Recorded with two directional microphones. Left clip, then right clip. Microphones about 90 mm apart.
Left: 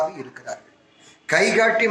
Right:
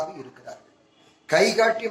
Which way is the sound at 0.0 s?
30° left (ahead or behind).